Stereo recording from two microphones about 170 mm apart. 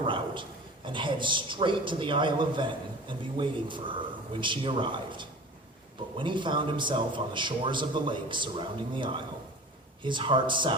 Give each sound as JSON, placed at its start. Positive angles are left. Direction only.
{"t": 0.9, "sound": "a man's voice", "side_deg": -30}